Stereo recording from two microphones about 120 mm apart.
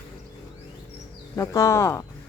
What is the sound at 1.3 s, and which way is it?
Speech, 25° left (ahead or behind).